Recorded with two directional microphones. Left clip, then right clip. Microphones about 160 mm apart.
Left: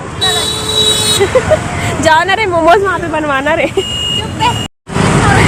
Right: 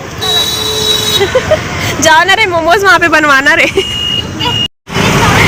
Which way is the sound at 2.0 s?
10° right (ahead or behind).